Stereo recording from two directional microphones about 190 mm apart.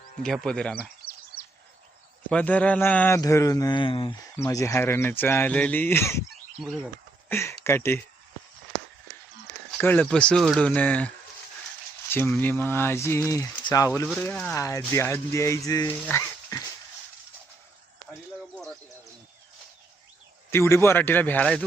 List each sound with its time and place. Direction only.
0.2 s speech: 5° left (ahead or behind)
2.3 s speech: 10° left (ahead or behind); by 4.1 s 25° left (ahead or behind)
4.4 s speech: 15° left (ahead or behind)
6.6 s speech: centre (ahead or behind)
7.3 s speech: 15° left (ahead or behind)
9.7 s speech: 5° left (ahead or behind)
20.5 s speech: 15° left (ahead or behind)